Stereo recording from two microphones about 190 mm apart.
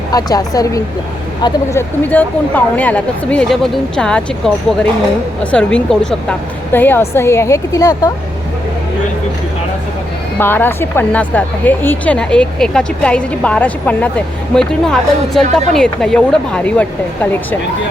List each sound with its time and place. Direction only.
0.1 s a woman's voice: 20° left (ahead or behind)
2.0 s speech: 10° left (ahead or behind)
10.3 s speech: 10° left (ahead or behind)